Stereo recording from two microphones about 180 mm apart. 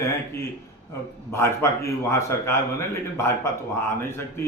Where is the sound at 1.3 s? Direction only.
15° left (ahead or behind).